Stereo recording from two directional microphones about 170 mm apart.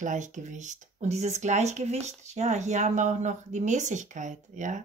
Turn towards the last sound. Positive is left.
turn(degrees=-45)  # may be behind; listen again after turning